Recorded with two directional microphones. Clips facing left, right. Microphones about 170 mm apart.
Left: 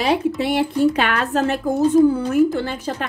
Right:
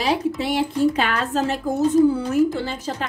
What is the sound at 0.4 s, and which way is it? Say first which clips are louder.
A woman's voice: left 2 dB; 60° left (ahead or behind).